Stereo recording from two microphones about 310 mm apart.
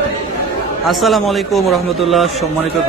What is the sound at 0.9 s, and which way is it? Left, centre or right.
Speech, centre.